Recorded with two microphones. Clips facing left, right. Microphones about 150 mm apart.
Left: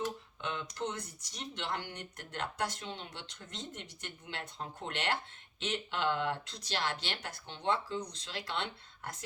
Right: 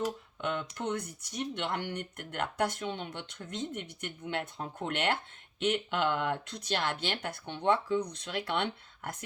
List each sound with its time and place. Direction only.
0.4 s speech: 55° right (ahead or behind)